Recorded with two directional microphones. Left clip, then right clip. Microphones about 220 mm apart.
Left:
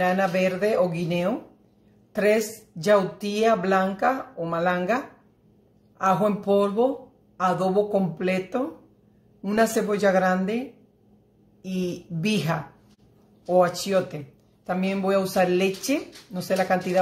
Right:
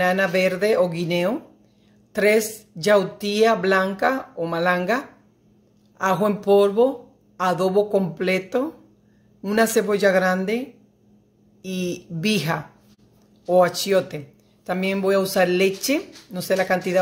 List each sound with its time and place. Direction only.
0.0 s speech: 35° right (ahead or behind)
11.6 s speech: 35° right (ahead or behind)